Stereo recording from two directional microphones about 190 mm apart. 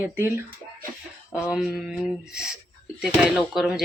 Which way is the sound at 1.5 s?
Centre (ahead or behind).